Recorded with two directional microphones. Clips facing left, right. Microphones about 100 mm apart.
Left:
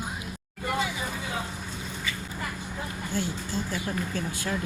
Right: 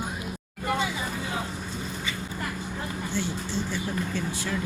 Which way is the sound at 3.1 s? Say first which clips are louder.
Left 1 dB; 45° left (ahead or behind).